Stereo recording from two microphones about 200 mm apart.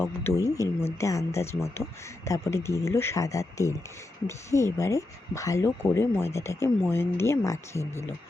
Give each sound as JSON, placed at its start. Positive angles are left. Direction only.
{"t": 0.0, "sound": "speech", "side_deg": 10}